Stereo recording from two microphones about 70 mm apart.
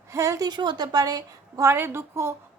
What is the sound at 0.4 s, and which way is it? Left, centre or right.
A woman's voice, right.